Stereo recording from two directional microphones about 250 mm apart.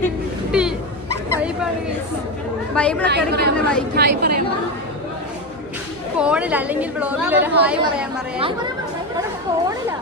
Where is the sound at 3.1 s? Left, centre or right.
Right.